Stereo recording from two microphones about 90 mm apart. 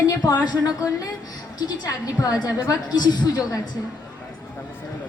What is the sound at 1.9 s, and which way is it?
A woman's voice, 40° left (ahead or behind).